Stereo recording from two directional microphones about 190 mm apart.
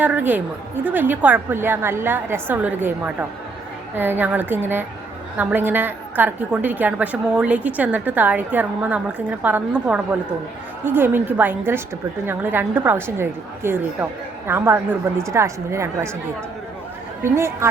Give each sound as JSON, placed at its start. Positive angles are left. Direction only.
{"t": 0.0, "sound": "a woman's voice", "side_deg": -10}
{"t": 17.2, "sound": "a woman's voice", "side_deg": -15}